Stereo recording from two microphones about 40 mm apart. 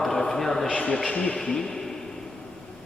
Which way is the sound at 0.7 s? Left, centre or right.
Left.